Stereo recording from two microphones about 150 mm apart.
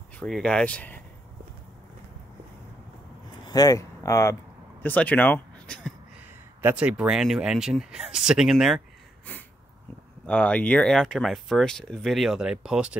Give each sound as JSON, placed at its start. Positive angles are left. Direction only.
{"t": 0.2, "sound": "speech", "side_deg": 5}
{"t": 3.4, "sound": "speech", "side_deg": 25}
{"t": 6.6, "sound": "speech", "side_deg": -10}
{"t": 10.2, "sound": "speech", "side_deg": 10}